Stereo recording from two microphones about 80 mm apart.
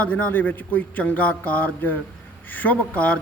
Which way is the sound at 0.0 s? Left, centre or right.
Left.